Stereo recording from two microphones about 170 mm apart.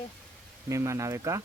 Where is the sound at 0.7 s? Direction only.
15° right (ahead or behind).